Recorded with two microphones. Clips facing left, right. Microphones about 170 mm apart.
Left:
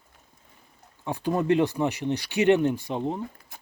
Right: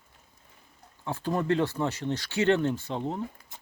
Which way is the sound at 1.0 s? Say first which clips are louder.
Left 3 dB; 15° left (ahead or behind).